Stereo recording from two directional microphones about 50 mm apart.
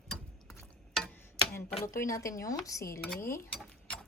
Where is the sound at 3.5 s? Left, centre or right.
Centre.